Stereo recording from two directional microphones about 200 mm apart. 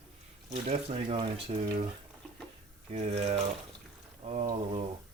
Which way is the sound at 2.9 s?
30° right (ahead or behind).